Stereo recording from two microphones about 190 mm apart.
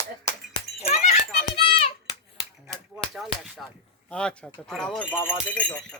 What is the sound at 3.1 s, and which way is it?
Speech, centre (ahead or behind).